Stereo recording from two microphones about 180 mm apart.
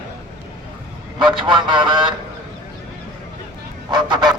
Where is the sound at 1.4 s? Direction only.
25° right (ahead or behind).